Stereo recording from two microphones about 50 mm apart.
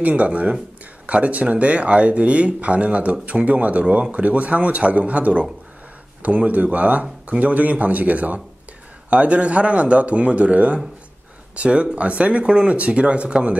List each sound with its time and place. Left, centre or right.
0.0 s speech: right